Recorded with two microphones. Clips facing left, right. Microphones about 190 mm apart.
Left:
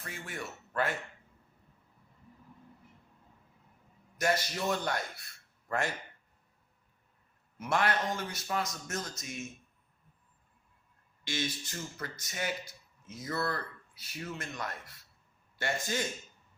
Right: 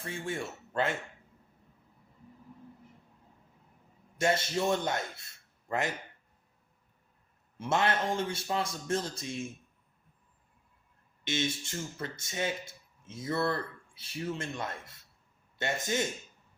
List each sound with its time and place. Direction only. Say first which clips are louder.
0.0 s speech: right 6 dB; 25° right (ahead or behind)
4.2 s a man's voice: right 3 dB; 25° right (ahead or behind)
7.6 s speech: right 1 dB; 25° right (ahead or behind)
11.3 s speech: right 3 dB; 25° right (ahead or behind)